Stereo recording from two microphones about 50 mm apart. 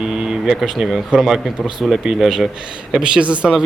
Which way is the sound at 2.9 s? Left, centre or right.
Right.